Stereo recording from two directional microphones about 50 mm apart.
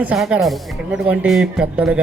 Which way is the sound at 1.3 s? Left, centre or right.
Centre.